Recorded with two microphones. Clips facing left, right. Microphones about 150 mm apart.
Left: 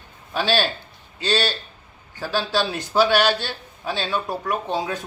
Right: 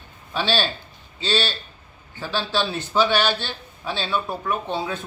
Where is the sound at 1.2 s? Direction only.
10° left (ahead or behind).